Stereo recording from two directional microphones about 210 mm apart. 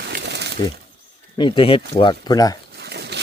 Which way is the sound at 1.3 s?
25° left (ahead or behind).